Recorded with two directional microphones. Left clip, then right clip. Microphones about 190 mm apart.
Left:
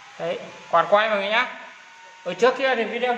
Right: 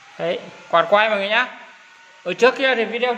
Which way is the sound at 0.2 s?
45° right (ahead or behind).